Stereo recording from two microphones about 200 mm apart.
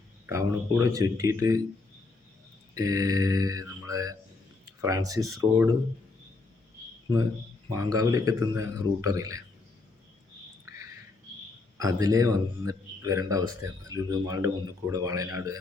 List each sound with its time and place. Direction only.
0.3 s a man's voice: 15° right (ahead or behind)
2.7 s a man's voice: 15° right (ahead or behind)
5.2 s speech: centre (ahead or behind)
7.7 s a man's voice: 15° right (ahead or behind)
11.8 s a man's voice: 15° right (ahead or behind)